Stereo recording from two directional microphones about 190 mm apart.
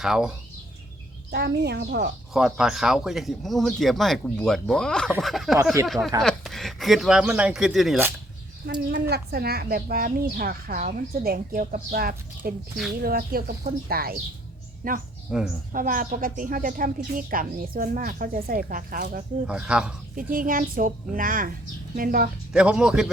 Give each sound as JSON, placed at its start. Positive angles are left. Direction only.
{"t": 0.0, "sound": "speech", "side_deg": -5}
{"t": 1.3, "sound": "a woman's voice", "side_deg": -60}
{"t": 2.3, "sound": "speech", "side_deg": -5}
{"t": 8.9, "sound": "a woman's voice", "side_deg": -55}
{"t": 15.3, "sound": "speech", "side_deg": -5}
{"t": 15.7, "sound": "a woman's voice", "side_deg": -45}
{"t": 19.5, "sound": "speech", "side_deg": -5}
{"t": 20.1, "sound": "a woman's voice", "side_deg": -45}
{"t": 22.5, "sound": "speech", "side_deg": -5}